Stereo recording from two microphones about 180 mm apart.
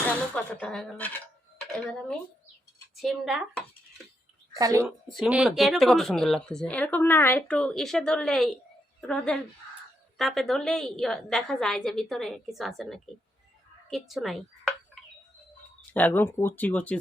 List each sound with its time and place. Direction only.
0.1 s speech: 5° left (ahead or behind)
4.5 s a woman's voice: 20° right (ahead or behind)
4.8 s speech: centre (ahead or behind)
15.9 s speech: 10° left (ahead or behind)